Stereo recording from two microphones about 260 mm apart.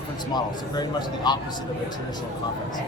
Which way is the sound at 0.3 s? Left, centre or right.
Centre.